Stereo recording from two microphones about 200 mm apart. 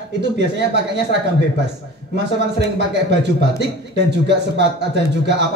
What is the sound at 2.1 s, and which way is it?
A man's voice, 60° right (ahead or behind).